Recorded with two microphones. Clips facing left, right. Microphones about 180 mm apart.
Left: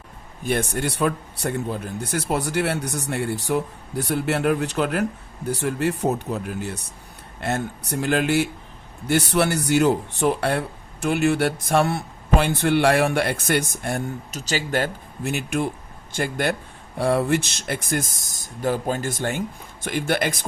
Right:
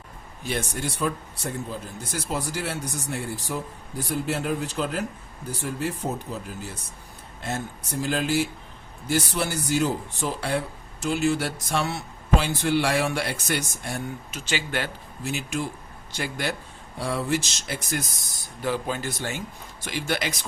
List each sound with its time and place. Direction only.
0.4 s speech: 60° left (ahead or behind); by 14.8 s 40° left (ahead or behind)
15.2 s speech: 60° left (ahead or behind)